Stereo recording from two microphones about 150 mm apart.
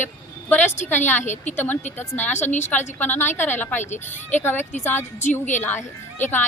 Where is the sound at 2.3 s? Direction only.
50° left (ahead or behind).